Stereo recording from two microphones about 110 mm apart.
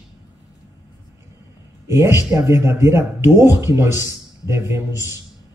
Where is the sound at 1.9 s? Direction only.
25° right (ahead or behind).